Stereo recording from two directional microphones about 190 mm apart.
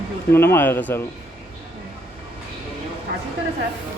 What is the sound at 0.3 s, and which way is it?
Speech, 10° left (ahead or behind).